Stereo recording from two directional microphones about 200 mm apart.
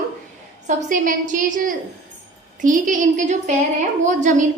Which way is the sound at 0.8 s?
40° right (ahead or behind).